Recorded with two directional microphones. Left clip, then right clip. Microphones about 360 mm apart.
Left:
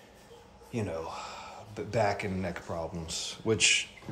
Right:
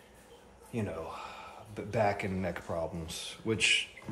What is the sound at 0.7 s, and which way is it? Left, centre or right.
Speech, centre.